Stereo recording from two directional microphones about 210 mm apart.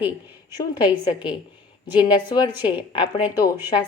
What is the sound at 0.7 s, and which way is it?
Speech, 20° left (ahead or behind).